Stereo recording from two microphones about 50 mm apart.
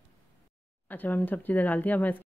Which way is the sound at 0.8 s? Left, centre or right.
Left.